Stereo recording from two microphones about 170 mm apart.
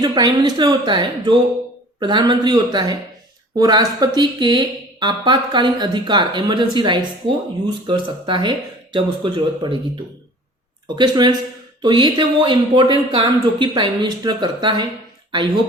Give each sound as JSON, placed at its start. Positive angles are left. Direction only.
{"t": 0.0, "sound": "speech", "side_deg": -25}
{"t": 10.8, "sound": "speech", "side_deg": -25}